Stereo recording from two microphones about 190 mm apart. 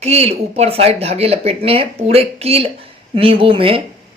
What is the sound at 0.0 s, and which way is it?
A woman's voice, 35° right (ahead or behind).